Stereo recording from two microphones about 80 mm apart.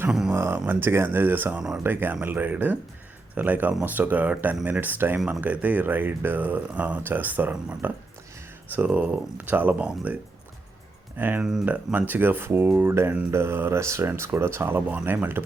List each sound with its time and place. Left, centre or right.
0.1 s speech: centre
0.7 s speech: right
1.5 s speech: centre
1.8 s speech: right
11.2 s speech: right